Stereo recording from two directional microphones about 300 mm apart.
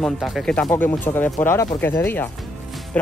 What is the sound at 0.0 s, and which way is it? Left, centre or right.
Speech, centre.